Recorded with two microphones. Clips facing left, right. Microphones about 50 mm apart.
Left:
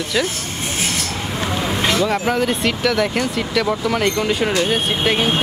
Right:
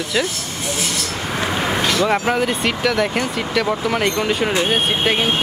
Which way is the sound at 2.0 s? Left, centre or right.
Centre.